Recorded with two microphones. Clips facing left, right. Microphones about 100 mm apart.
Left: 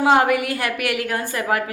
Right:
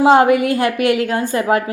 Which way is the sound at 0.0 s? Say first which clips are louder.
Right 5 dB; 25° right (ahead or behind).